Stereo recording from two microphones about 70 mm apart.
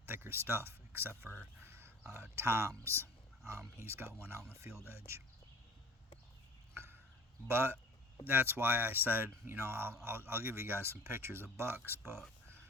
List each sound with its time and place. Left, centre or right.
0.0 s speech: right
1.6 s a sound: right
2.1 s speech: right
7.4 s speech: right